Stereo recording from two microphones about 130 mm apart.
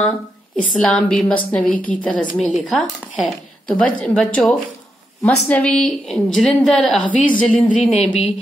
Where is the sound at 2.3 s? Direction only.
Centre (ahead or behind).